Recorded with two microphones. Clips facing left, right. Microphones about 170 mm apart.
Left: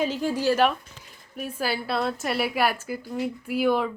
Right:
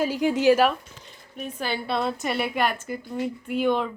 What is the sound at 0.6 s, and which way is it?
Speech, 5° left (ahead or behind).